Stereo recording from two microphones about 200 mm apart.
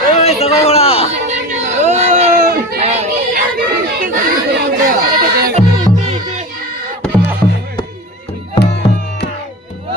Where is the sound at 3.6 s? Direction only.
45° right (ahead or behind).